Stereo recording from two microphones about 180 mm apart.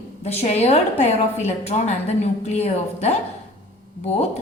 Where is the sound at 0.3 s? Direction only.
35° left (ahead or behind).